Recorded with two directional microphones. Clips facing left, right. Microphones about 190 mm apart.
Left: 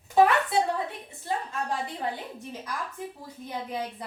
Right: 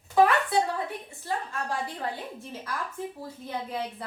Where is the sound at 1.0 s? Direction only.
20° left (ahead or behind).